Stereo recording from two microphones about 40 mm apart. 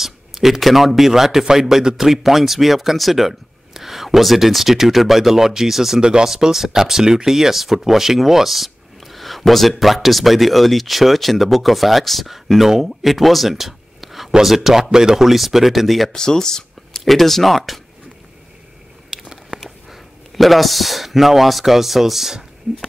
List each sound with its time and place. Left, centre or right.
0.0 s a man's voice: centre
5.9 s speech: right
6.2 s a man's voice: centre
15.2 s speech: centre
16.1 s speech: centre
17.0 s speech: centre
19.0 s a sound: centre
19.6 s speech: centre